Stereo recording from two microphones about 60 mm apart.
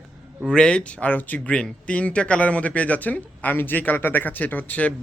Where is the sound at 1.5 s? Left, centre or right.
Centre.